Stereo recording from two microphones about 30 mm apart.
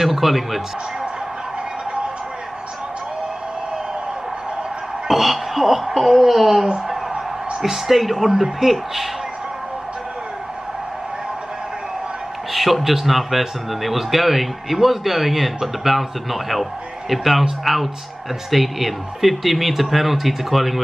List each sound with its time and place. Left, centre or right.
0.0 s a man's voice: centre
5.1 s a sound: centre
5.9 s a man's voice: centre
8.3 s speech: centre
12.5 s a man's voice: centre